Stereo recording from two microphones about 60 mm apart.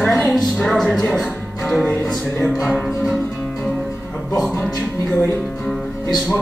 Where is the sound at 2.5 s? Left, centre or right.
Centre.